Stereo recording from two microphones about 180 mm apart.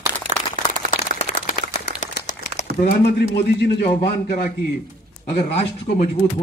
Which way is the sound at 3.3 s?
65° left (ahead or behind).